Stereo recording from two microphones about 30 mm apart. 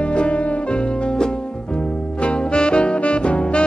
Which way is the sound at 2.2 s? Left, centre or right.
Left.